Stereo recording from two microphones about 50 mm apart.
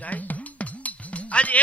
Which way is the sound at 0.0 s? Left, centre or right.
Left.